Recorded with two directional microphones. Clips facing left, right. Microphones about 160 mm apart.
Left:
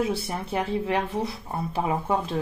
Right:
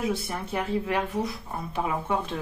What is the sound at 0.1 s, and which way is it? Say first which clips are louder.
Speech: left 2 dB; 30° left (ahead or behind).